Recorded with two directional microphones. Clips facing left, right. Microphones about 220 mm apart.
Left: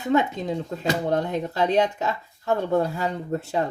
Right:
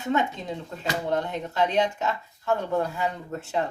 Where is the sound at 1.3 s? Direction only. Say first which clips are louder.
Left 3 dB; 40° left (ahead or behind).